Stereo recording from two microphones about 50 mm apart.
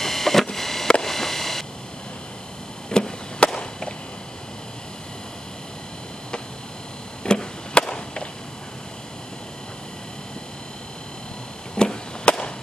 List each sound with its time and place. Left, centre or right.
0.0 s a sound: centre
2.9 s chop: centre
7.2 s chop: centre
11.7 s chop: centre